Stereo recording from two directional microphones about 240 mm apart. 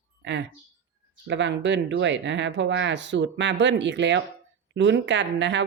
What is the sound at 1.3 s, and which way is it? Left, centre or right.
Speech, right.